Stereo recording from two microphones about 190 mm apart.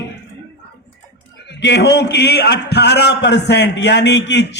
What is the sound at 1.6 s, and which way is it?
A man's voice, 60° left (ahead or behind).